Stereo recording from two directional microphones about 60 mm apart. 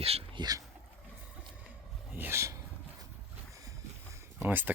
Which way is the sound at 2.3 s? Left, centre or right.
Right.